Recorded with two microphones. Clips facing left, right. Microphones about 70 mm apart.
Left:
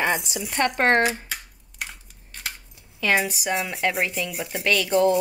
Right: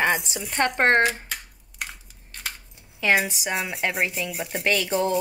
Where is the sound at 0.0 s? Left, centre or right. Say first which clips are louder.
Right 1 dB; right.